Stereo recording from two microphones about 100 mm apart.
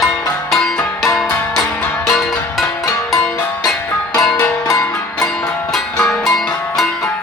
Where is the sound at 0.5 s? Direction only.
5° left (ahead or behind).